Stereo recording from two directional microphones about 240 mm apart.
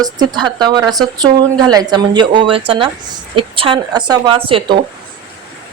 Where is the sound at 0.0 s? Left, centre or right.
Centre.